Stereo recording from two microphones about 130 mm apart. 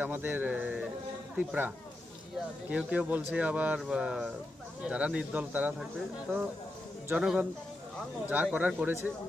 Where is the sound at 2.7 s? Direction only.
10° right (ahead or behind).